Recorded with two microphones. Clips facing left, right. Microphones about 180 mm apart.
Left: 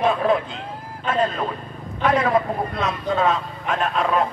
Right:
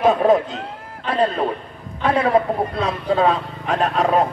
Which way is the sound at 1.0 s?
35° right (ahead or behind).